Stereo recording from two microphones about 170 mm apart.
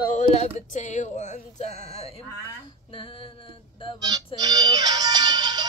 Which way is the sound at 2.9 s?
30° left (ahead or behind).